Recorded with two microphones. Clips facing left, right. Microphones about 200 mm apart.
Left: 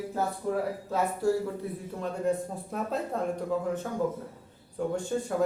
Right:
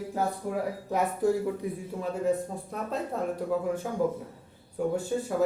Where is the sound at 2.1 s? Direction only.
Centre (ahead or behind).